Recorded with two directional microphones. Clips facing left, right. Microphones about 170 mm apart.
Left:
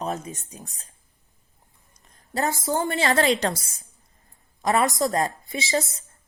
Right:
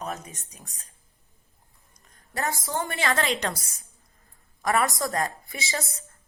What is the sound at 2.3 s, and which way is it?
A woman's voice, 25° left (ahead or behind).